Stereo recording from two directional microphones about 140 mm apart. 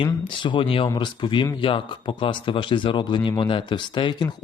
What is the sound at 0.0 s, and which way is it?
Speech, 35° left (ahead or behind).